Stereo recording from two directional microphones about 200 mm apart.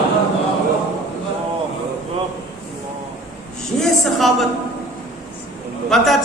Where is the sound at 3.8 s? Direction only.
Centre (ahead or behind).